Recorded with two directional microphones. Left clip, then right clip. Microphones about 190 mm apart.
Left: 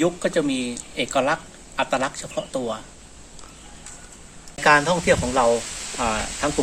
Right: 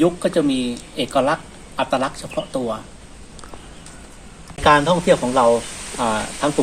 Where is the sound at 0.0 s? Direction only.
5° left (ahead or behind).